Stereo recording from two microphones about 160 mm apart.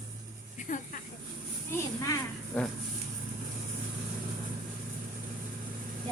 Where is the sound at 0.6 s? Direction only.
55° left (ahead or behind).